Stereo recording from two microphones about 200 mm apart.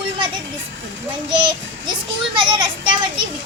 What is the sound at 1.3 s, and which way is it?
A child's voice, 25° right (ahead or behind).